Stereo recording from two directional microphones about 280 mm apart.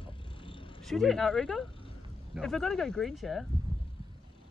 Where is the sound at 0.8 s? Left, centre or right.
Centre.